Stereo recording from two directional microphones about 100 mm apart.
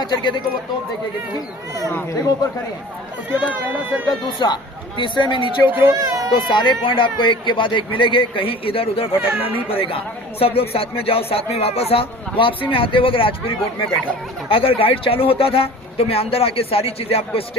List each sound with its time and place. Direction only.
0.0 s speech: 50° left (ahead or behind)
2.0 s speech: 35° left (ahead or behind)
3.2 s speech: 15° right (ahead or behind)
4.3 s speech: 50° left (ahead or behind)
5.6 s speech: 20° right (ahead or behind)
5.9 s a child's voice: 35° right (ahead or behind)
6.5 s speech: 50° left (ahead or behind); by 17.6 s 75° left (ahead or behind)